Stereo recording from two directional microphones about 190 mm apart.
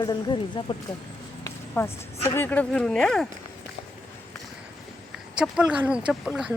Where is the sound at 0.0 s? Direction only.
20° left (ahead or behind).